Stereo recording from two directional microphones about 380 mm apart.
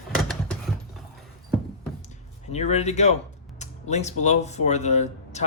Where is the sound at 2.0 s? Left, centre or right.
Centre.